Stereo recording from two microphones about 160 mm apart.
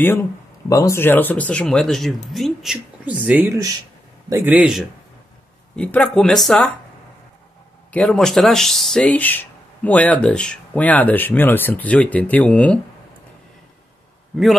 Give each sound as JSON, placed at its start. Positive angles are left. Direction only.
{"t": 0.7, "sound": "speech", "side_deg": 20}
{"t": 3.3, "sound": "speech", "side_deg": -15}
{"t": 5.8, "sound": "speech", "side_deg": 5}
{"t": 7.9, "sound": "speech", "side_deg": 5}